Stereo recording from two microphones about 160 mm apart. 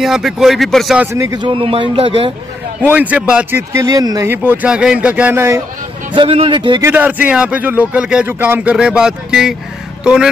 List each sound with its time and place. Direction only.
0.0 s speech: centre (ahead or behind)
1.0 s speech: 15° right (ahead or behind)
1.4 s a man's voice: 35° right (ahead or behind)
2.8 s speech: 10° right (ahead or behind)
3.7 s speech: 20° right (ahead or behind)
4.3 s speech: 10° right (ahead or behind)
6.1 s a man's voice: 35° right (ahead or behind)
6.8 s speech: 10° right (ahead or behind)